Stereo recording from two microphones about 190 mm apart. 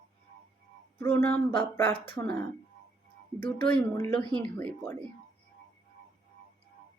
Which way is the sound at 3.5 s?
10° left (ahead or behind).